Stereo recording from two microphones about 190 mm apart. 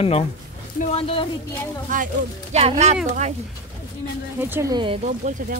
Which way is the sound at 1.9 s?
45° right (ahead or behind).